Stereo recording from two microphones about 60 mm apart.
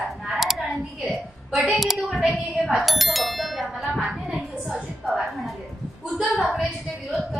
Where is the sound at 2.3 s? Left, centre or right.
Centre.